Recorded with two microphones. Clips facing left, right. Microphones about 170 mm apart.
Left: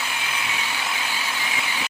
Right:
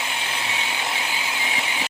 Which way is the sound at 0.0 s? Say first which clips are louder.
Right 1 dB; 25° right (ahead or behind).